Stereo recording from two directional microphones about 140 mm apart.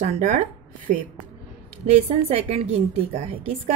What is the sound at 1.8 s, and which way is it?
A woman's voice, 45° right (ahead or behind).